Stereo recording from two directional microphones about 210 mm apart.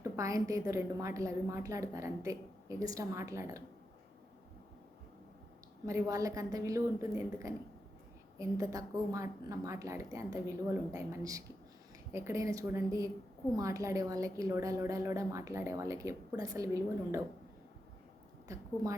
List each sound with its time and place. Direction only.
0.0 s a woman's voice: 15° right (ahead or behind)
5.8 s a woman's voice: 15° right (ahead or behind)
18.4 s a woman's voice: 15° right (ahead or behind)